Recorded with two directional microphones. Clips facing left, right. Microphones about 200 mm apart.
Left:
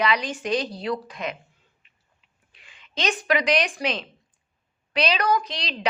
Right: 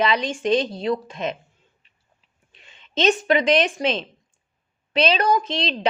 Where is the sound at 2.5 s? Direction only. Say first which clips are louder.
Right 7 dB; 25° right (ahead or behind).